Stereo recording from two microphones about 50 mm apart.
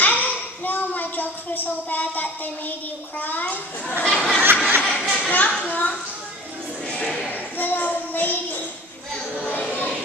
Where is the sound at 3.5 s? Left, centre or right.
Left.